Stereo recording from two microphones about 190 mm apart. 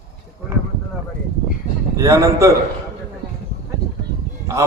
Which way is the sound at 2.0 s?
15° right (ahead or behind).